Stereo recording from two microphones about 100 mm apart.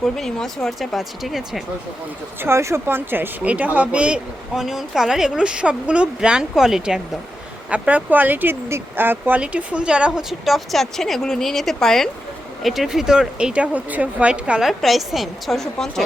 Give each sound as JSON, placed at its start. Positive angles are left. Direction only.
{"t": 0.0, "sound": "speech", "side_deg": 5}
{"t": 2.4, "sound": "speech", "side_deg": -30}